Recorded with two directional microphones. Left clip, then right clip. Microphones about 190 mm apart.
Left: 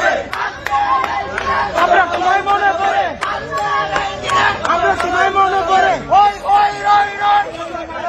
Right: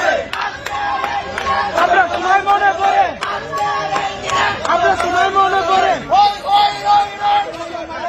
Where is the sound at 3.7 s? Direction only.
15° right (ahead or behind).